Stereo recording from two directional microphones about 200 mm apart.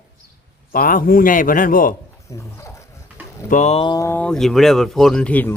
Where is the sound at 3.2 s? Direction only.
10° right (ahead or behind).